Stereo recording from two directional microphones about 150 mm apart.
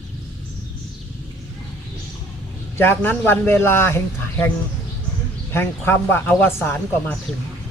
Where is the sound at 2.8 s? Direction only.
15° left (ahead or behind).